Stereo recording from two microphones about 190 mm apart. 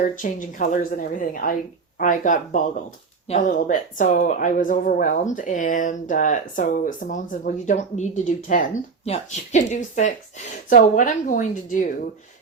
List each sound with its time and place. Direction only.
0.0 s speech: 45° left (ahead or behind)